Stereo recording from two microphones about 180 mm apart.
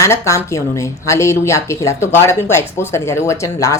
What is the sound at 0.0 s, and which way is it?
Speech, 15° left (ahead or behind).